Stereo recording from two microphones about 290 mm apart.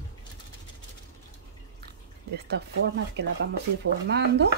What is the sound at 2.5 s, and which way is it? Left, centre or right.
Speech, right.